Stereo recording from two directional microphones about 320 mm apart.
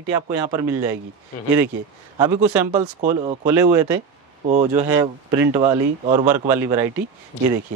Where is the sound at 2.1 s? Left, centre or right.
Centre.